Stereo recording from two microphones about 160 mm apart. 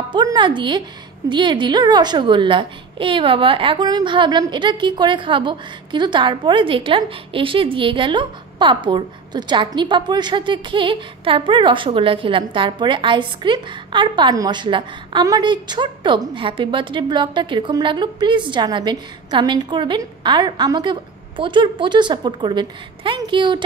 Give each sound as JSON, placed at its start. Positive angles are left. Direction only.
{"t": 0.1, "sound": "a child's voice", "side_deg": -30}